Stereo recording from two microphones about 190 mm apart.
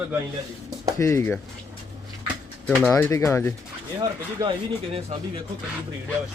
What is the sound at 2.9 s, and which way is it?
Speech, 15° left (ahead or behind).